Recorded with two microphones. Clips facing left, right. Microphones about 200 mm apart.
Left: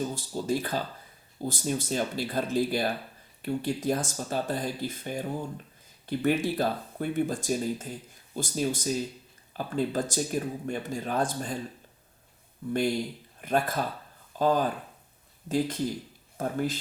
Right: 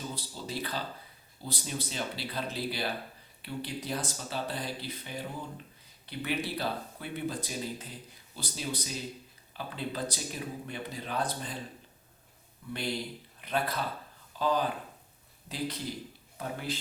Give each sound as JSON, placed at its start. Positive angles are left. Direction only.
{"t": 0.0, "sound": "speech", "side_deg": 45}
{"t": 12.6, "sound": "speech", "side_deg": 50}